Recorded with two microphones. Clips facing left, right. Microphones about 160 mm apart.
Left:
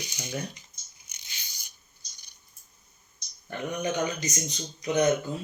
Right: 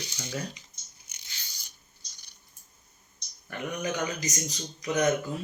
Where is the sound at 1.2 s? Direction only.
15° left (ahead or behind).